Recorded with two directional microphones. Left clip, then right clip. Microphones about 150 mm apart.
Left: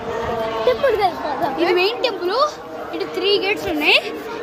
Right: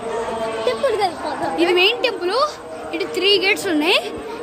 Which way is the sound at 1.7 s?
25° right (ahead or behind).